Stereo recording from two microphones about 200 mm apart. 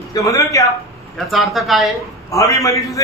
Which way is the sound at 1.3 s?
Centre (ahead or behind).